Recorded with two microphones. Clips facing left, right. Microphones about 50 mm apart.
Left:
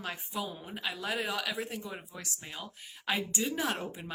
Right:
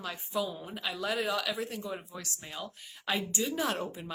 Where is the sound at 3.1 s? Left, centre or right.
Left.